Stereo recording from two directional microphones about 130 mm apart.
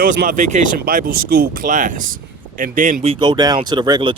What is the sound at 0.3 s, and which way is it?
Speech, 75° right (ahead or behind).